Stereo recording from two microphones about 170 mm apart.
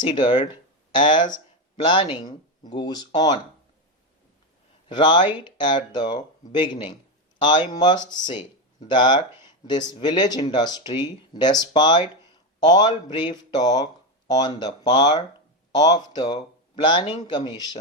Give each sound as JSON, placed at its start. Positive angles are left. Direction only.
{"t": 0.0, "sound": "speech", "side_deg": 25}
{"t": 4.9, "sound": "speech", "side_deg": 25}